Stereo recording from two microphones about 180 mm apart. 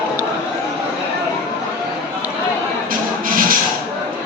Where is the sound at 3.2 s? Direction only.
50° right (ahead or behind).